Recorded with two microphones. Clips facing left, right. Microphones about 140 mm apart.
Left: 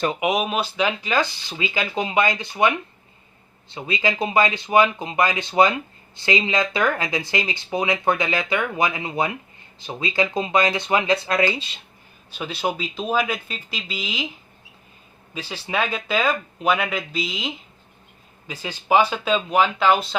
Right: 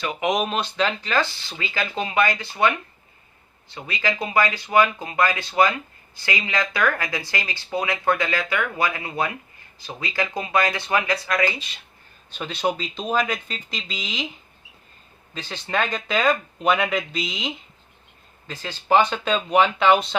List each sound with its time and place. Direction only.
0.2 s speech: 5° left (ahead or behind); by 11.7 s 25° left (ahead or behind)
12.3 s speech: 10° left (ahead or behind)
15.4 s speech: 10° left (ahead or behind)